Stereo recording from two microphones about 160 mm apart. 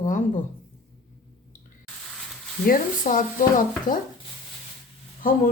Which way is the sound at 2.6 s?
55° left (ahead or behind).